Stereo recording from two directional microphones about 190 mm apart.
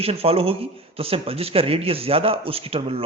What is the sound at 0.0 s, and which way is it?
Speech, 30° right (ahead or behind).